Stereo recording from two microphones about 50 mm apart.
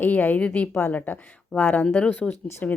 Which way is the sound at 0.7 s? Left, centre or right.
Left.